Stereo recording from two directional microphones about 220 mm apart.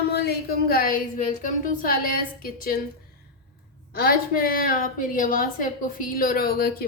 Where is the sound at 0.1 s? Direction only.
45° left (ahead or behind).